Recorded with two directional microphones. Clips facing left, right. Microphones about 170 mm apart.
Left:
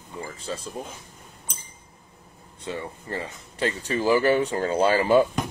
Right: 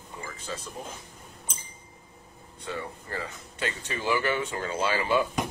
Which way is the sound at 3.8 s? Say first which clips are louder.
Left 7 dB; 35° left (ahead or behind).